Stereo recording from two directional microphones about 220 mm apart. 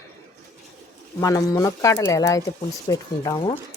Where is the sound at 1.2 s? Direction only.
15° left (ahead or behind).